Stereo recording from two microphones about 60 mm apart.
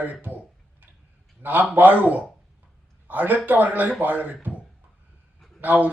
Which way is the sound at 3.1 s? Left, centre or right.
Right.